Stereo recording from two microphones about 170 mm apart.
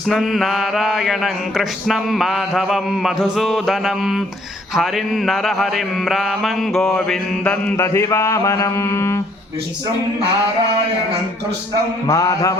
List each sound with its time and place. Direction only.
0.1 s mantra: centre (ahead or behind)
7.8 s speech: 15° left (ahead or behind)
12.0 s mantra: 20° left (ahead or behind)